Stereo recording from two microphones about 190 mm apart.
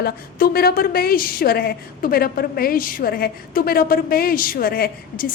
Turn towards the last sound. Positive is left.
turn(degrees=50)  # may be behind; listen again after turning